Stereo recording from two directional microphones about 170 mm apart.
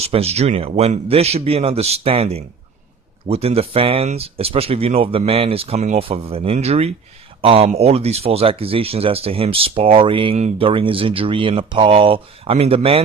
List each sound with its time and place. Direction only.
0.0 s speech: 35° right (ahead or behind)